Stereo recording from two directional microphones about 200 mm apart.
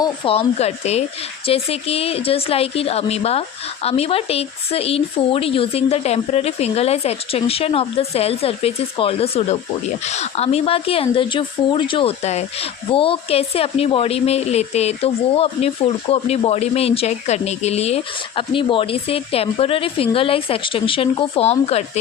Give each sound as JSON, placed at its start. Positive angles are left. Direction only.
{"t": 0.0, "sound": "speech", "side_deg": 30}